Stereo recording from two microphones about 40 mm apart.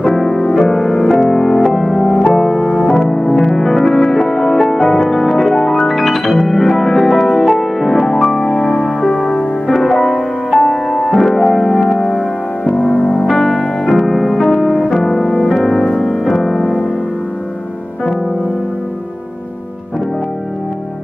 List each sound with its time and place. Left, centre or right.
0.1 s music: centre
9.1 s music: left
9.7 s music: centre
11.1 s keyboard: centre
12.9 s music: left
13.3 s music: centre
15.1 s music: left
15.5 s music: centre
15.8 s music: centre
16.3 s music: centre